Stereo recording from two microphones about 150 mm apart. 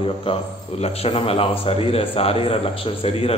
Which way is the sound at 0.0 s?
40° left (ahead or behind).